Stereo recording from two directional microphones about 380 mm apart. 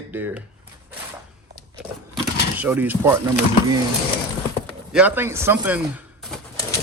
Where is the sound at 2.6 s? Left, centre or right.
Centre.